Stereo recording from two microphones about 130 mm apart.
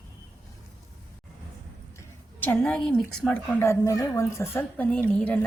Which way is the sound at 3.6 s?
25° left (ahead or behind).